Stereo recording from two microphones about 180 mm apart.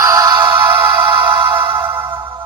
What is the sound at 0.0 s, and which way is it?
Music, 15° right (ahead or behind).